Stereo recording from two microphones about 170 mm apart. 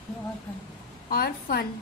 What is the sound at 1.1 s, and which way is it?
Speech, 60° left (ahead or behind).